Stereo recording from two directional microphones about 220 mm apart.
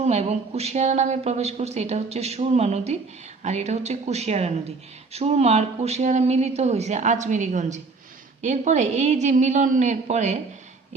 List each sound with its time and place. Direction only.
0.0 s speech: 30° right (ahead or behind)